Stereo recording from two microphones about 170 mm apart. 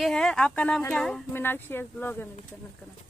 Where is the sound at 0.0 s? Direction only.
5° left (ahead or behind).